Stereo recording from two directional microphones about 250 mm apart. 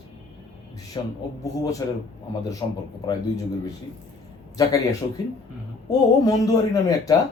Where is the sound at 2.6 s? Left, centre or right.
Centre.